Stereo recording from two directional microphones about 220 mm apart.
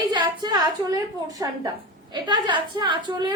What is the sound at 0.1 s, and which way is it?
A woman's voice, 20° right (ahead or behind).